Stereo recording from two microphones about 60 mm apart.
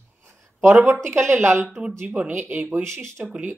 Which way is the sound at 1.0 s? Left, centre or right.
Right.